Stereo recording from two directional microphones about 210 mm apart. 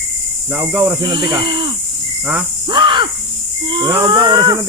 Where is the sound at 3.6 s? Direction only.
20° right (ahead or behind).